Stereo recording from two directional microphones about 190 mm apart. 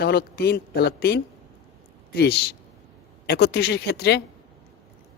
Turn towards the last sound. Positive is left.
turn(degrees=60)  # may be behind; listen again after turning